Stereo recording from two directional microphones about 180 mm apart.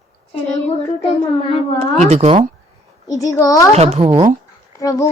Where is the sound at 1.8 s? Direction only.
35° right (ahead or behind).